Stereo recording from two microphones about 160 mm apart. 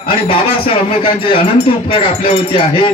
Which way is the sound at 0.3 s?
35° left (ahead or behind).